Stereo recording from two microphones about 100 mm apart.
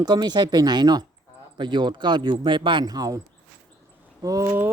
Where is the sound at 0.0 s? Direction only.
45° right (ahead or behind).